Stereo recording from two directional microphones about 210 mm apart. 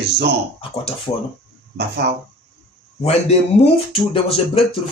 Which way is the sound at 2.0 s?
50° right (ahead or behind).